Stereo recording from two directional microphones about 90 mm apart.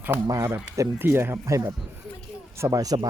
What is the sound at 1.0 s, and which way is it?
Speech, 25° right (ahead or behind).